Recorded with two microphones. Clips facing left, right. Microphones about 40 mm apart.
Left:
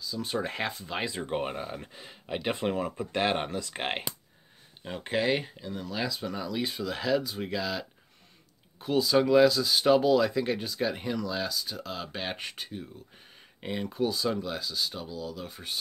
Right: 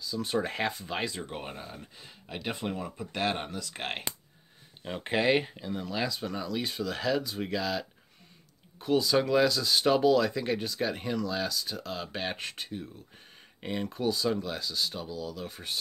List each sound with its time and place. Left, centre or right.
0.0 s speech: centre
1.0 s speech: centre
2.0 s speech: centre
4.8 s speech: centre